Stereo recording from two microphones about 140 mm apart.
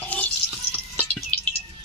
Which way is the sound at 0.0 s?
10° left (ahead or behind).